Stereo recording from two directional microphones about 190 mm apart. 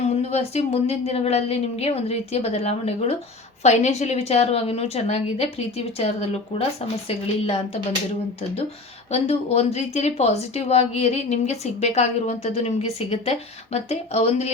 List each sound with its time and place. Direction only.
0.0 s a woman's voice: 35° left (ahead or behind)
9.1 s a woman's voice: 30° left (ahead or behind)